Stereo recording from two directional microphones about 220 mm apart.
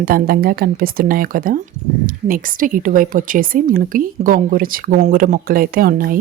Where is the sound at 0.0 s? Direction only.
40° right (ahead or behind).